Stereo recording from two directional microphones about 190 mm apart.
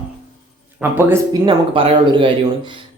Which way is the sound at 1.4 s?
25° right (ahead or behind).